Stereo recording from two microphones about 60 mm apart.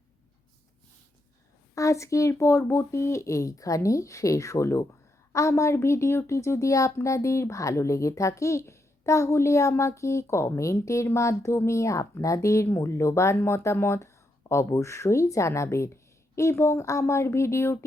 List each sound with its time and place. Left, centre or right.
1.7 s speech: left
12.6 s speech: left
16.8 s speech: left